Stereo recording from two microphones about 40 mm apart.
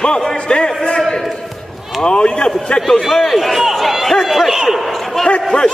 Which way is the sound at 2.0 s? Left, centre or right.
Left.